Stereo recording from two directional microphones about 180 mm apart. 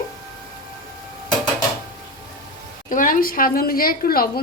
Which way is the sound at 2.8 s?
50° left (ahead or behind).